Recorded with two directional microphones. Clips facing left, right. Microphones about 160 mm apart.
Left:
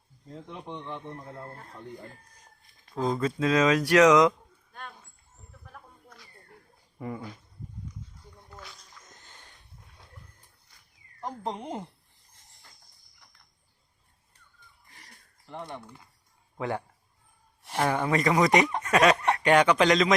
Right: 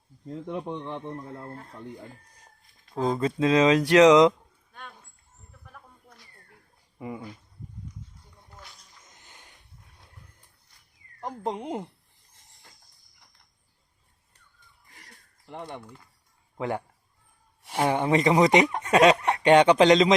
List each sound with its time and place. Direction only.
2.9 s speech: 25° right (ahead or behind)
9.2 s a sound: 15° right (ahead or behind)
11.2 s speech: 15° right (ahead or behind)
15.4 s speech: 15° right (ahead or behind)
17.8 s speech: 25° right (ahead or behind)